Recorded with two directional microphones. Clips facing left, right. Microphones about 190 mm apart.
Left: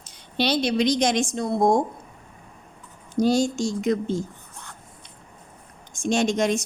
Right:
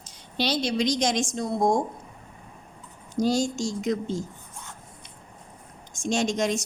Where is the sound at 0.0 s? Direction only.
60° left (ahead or behind).